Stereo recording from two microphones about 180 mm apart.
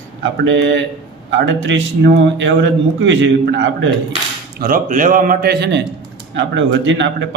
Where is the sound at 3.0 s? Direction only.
90° right.